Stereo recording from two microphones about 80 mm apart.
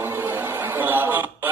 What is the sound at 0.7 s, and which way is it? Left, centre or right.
Music, right.